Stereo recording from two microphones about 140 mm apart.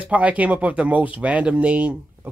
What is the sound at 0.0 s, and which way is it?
Speech, 10° right (ahead or behind).